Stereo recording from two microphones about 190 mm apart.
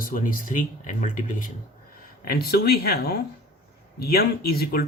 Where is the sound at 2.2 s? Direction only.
55° left (ahead or behind).